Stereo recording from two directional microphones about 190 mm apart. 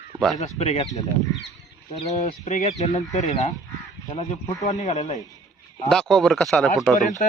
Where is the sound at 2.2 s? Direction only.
40° left (ahead or behind).